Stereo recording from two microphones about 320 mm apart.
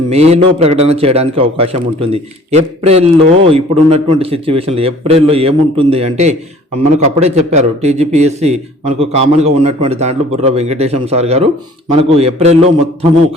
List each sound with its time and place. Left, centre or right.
0.1 s a man's voice: centre